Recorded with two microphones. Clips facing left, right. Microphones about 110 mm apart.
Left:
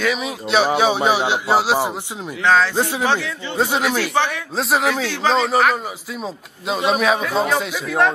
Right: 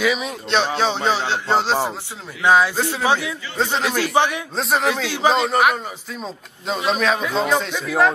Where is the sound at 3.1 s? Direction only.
10° right (ahead or behind).